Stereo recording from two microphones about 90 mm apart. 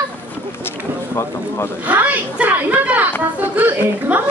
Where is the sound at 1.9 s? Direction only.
20° right (ahead or behind).